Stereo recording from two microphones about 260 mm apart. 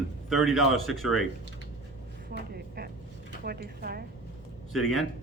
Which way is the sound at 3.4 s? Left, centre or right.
Right.